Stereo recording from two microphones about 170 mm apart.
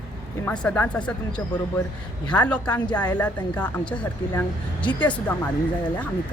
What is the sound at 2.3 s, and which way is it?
Speech, 5° left (ahead or behind).